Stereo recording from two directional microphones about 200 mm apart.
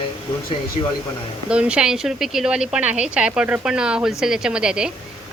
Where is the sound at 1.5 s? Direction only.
5° right (ahead or behind).